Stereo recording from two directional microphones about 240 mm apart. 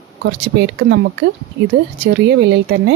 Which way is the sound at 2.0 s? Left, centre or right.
Right.